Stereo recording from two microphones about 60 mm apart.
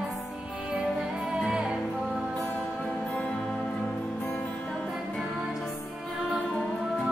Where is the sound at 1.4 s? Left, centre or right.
Centre.